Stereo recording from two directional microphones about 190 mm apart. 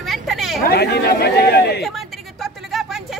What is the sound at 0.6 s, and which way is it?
Speech, 60° left (ahead or behind).